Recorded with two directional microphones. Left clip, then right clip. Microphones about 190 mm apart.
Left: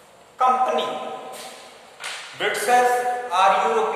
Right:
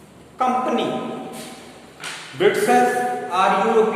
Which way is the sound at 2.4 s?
Centre (ahead or behind).